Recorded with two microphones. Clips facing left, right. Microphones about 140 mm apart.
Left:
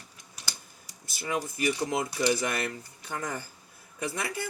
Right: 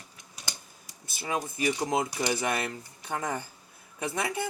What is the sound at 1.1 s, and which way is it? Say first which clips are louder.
Speech: even; 20° right (ahead or behind).